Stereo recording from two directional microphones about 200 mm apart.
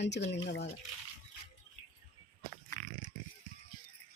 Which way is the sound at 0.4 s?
60° left (ahead or behind).